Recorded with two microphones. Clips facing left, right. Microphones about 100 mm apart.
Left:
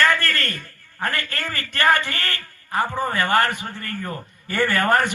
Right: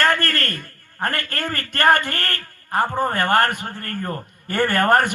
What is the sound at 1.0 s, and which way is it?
A man's voice, 50° right (ahead or behind).